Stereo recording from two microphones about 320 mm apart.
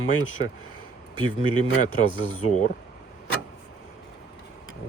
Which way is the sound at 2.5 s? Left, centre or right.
Left.